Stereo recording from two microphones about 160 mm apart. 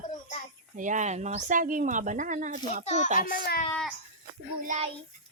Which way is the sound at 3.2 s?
65° left (ahead or behind).